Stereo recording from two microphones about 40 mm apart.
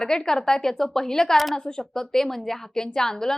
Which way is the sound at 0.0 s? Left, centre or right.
Centre.